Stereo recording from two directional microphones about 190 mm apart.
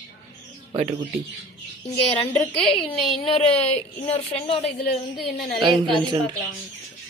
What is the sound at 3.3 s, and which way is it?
A woman's voice, 30° left (ahead or behind).